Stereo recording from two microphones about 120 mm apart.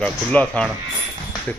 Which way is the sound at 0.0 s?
10° left (ahead or behind).